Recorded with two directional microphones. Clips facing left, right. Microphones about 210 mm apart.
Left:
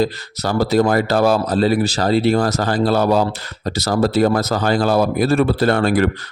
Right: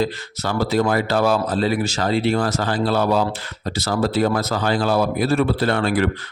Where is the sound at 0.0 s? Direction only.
40° left (ahead or behind).